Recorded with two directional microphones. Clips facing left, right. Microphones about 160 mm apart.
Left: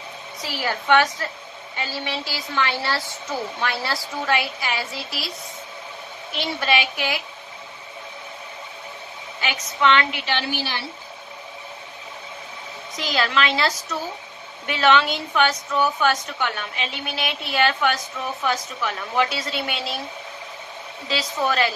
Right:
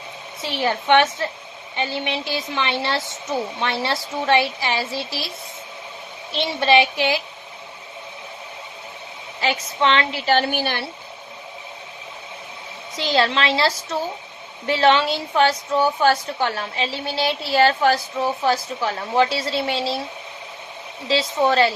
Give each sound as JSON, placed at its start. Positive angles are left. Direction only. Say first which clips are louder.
{"t": 0.4, "sound": "a woman's voice", "louder": "right 4 dB", "side_deg": -25}
{"t": 6.3, "sound": "a woman's voice", "louder": "right 6 dB", "side_deg": -25}
{"t": 9.4, "sound": "a woman's voice", "louder": "right 2 dB", "side_deg": -30}
{"t": 12.9, "sound": "a woman's voice", "louder": "right 3 dB", "side_deg": -30}
{"t": 21.1, "sound": "a woman's voice", "louder": "right 5 dB", "side_deg": -25}